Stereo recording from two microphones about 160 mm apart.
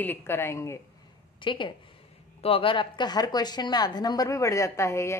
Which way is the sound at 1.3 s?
30° left (ahead or behind).